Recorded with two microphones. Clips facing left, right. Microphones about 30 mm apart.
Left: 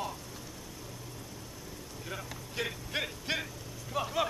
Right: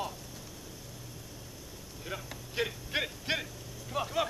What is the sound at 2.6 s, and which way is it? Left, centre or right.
Speech, centre.